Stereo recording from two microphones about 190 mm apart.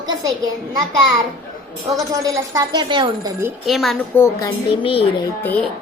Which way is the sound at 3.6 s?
Centre (ahead or behind).